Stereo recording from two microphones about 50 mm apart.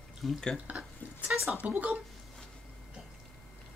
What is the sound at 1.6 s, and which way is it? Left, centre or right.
Speech, right.